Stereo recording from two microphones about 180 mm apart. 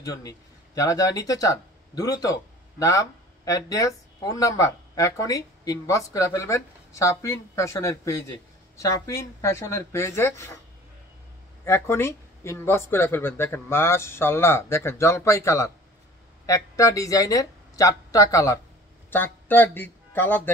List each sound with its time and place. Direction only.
0.0 s speech: 20° left (ahead or behind)
11.6 s a man's voice: 15° left (ahead or behind)